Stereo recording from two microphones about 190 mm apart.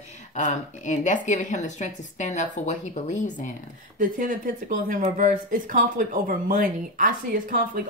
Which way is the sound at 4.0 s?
45° right (ahead or behind).